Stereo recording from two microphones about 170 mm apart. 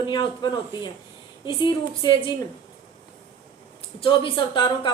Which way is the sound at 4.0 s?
30° left (ahead or behind).